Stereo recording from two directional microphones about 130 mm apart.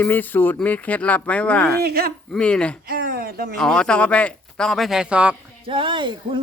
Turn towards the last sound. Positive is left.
turn(degrees=-40)  # may be behind; listen again after turning